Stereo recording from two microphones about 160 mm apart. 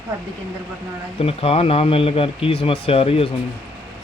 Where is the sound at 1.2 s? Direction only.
40° left (ahead or behind).